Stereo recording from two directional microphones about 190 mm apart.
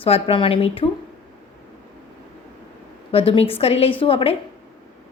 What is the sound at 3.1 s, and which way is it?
A woman's voice, 30° left (ahead or behind).